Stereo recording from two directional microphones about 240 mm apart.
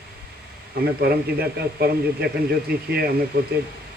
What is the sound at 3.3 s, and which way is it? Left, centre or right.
Speech, right.